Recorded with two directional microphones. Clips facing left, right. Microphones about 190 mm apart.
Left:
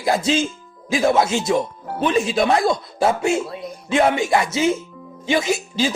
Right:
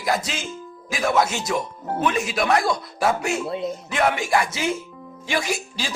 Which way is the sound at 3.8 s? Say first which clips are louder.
Left 6 dB; 25° left (ahead or behind).